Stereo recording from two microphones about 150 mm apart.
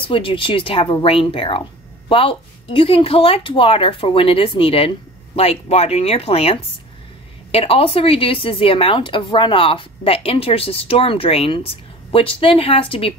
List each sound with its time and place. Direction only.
0.0 s speech: 35° left (ahead or behind)